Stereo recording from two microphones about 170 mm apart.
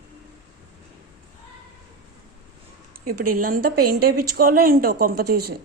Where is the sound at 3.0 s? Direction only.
60° right (ahead or behind).